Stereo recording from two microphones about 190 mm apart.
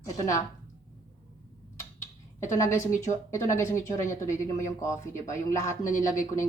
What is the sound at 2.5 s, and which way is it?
A woman's voice, 15° left (ahead or behind).